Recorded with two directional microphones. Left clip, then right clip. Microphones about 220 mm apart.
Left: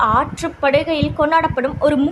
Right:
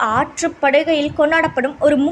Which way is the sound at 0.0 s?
5° right (ahead or behind).